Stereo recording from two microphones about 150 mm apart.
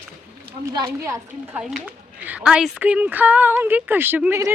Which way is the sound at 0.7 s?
20° right (ahead or behind).